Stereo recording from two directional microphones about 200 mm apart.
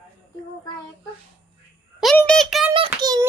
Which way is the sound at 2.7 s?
20° right (ahead or behind).